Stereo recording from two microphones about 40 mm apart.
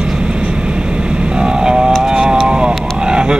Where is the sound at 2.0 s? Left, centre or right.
Centre.